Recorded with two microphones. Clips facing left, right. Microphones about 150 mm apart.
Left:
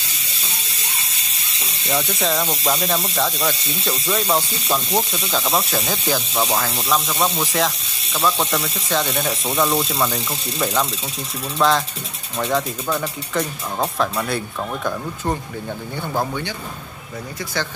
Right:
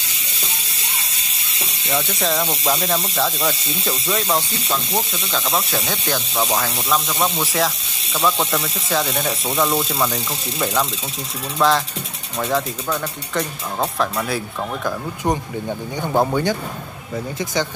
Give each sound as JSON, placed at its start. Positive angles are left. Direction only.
{"t": 1.9, "sound": "speech", "side_deg": 0}
{"t": 4.6, "sound": "speech", "side_deg": 15}
{"t": 5.5, "sound": "speech", "side_deg": 0}
{"t": 15.2, "sound": "speech", "side_deg": -15}
{"t": 16.3, "sound": "a man's voice", "side_deg": -40}